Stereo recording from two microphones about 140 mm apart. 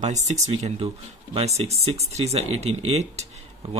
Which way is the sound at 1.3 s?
50° right (ahead or behind).